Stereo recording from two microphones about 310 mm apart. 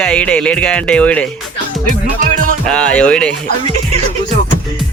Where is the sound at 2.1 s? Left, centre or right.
Right.